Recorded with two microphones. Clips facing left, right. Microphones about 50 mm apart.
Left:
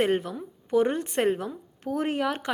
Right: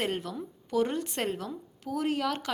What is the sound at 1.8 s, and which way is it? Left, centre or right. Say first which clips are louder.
Speech: left 3 dB; left.